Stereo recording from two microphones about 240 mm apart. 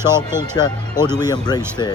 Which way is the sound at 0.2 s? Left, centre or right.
Centre.